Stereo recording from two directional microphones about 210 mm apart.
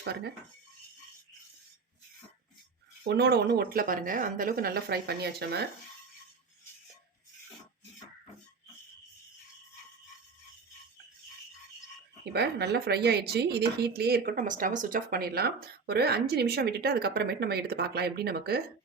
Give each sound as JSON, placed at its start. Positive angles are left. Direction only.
{"t": 3.0, "sound": "a woman's voice", "side_deg": -50}
{"t": 12.3, "sound": "a woman's voice", "side_deg": -50}